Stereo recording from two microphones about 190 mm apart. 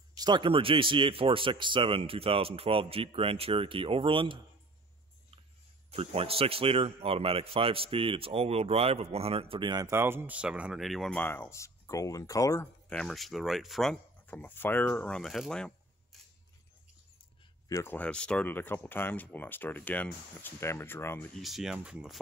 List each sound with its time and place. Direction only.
0.1 s a man's voice: 20° right (ahead or behind)
5.9 s a man's voice: 30° right (ahead or behind); by 12.6 s 20° left (ahead or behind)
12.9 s speech: centre (ahead or behind)
17.6 s speech: 15° left (ahead or behind); by 22.2 s 5° right (ahead or behind)